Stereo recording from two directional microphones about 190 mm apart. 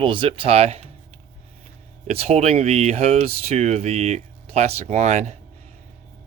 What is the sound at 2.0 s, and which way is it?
Speech, 35° right (ahead or behind).